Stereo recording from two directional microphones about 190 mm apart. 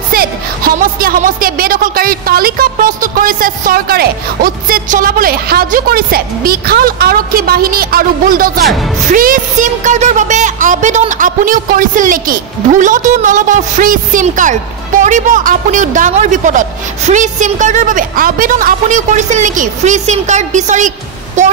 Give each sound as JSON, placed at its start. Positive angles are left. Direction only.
{"t": 0.1, "sound": "a woman's voice", "side_deg": -50}
{"t": 8.6, "sound": "speech", "side_deg": 0}
{"t": 9.1, "sound": "a woman's voice", "side_deg": -45}